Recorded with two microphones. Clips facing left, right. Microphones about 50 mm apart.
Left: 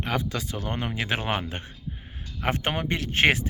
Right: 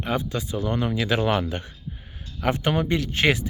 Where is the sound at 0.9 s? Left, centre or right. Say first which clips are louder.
Right 4 dB; left.